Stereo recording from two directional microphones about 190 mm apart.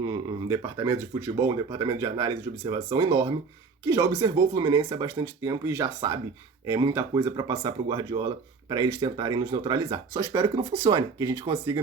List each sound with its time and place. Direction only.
0.0 s speech: 20° right (ahead or behind)